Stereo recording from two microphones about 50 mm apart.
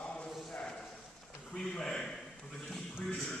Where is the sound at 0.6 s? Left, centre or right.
Centre.